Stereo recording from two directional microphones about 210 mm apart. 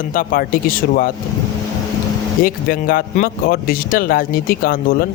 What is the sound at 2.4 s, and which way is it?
Speech, 45° left (ahead or behind).